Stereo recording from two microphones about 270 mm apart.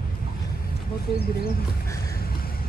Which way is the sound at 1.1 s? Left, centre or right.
Left.